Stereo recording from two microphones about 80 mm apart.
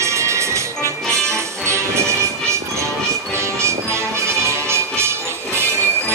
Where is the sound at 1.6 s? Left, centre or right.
Right.